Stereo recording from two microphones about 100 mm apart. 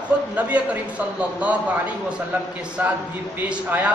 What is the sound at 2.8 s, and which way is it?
A man's voice, 20° right (ahead or behind).